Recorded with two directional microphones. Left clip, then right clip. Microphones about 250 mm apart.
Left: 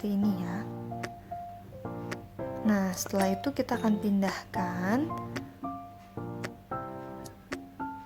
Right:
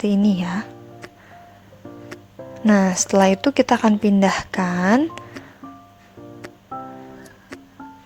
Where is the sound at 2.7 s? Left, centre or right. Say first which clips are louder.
Right 14 dB; right.